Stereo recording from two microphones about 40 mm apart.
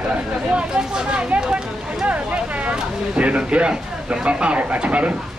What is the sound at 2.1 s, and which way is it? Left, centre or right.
Speech, right.